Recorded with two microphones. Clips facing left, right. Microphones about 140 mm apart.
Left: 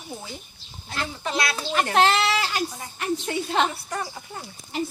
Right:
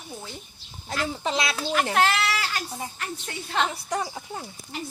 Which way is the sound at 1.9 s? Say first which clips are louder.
Left 6 dB; 25° left (ahead or behind).